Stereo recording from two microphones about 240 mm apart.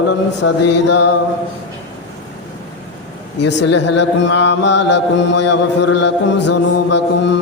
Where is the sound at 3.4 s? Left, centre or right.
Left.